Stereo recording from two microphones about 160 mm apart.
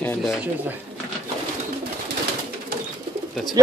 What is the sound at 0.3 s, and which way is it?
Speech, 10° right (ahead or behind).